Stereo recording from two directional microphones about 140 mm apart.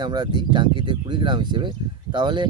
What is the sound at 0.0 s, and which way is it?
Speech, 30° right (ahead or behind).